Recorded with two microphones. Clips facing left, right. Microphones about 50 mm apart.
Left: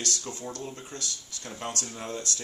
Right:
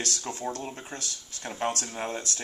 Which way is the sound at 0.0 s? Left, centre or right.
Right.